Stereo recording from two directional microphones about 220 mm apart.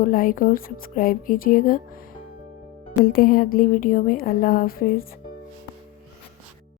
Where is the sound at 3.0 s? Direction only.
40° left (ahead or behind).